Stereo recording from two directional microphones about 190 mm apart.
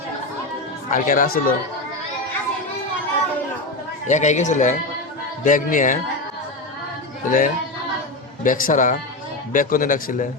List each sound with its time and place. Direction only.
0.9 s a man's voice: 45° left (ahead or behind)
4.0 s a man's voice: 40° left (ahead or behind)
7.3 s a man's voice: 45° left (ahead or behind)